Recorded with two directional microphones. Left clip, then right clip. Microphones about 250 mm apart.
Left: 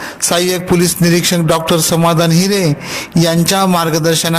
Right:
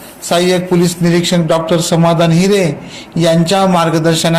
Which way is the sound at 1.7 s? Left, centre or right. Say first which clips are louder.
Even; left.